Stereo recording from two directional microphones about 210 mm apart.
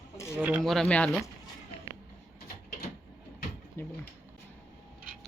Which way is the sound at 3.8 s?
10° left (ahead or behind).